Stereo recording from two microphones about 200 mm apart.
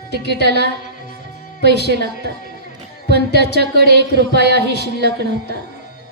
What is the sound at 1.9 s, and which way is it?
Speech, 55° right (ahead or behind).